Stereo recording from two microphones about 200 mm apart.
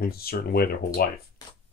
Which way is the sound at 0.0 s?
50° left (ahead or behind).